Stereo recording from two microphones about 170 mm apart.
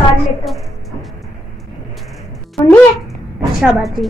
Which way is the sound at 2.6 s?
10° left (ahead or behind).